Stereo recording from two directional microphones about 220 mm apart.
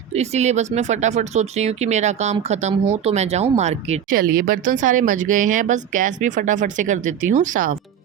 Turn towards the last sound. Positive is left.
turn(degrees=-35)  # may be behind; listen again after turning